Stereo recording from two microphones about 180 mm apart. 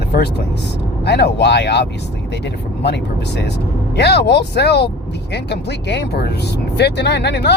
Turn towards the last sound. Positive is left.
turn(degrees=65)  # may be behind; listen again after turning